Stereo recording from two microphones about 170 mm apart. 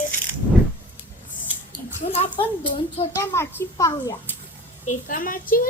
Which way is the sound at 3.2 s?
15° left (ahead or behind).